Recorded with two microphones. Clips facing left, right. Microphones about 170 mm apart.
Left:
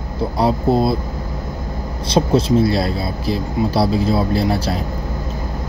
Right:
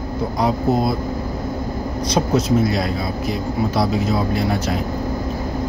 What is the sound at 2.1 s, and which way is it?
Speech, 30° left (ahead or behind).